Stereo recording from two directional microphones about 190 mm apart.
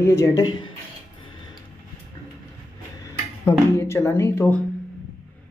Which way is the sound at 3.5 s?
15° left (ahead or behind).